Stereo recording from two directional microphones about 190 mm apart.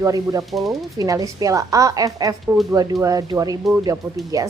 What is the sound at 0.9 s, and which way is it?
A woman's voice, 20° right (ahead or behind).